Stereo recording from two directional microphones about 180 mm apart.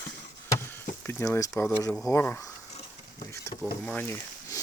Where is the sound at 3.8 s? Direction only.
10° left (ahead or behind).